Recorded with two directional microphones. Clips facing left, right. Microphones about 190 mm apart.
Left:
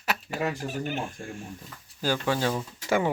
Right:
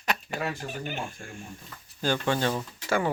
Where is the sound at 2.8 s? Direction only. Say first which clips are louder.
Left 2 dB; 15° left (ahead or behind).